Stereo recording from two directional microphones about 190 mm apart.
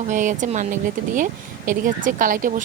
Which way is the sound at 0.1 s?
40° right (ahead or behind).